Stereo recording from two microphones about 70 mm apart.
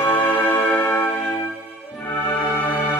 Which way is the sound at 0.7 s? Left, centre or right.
Centre.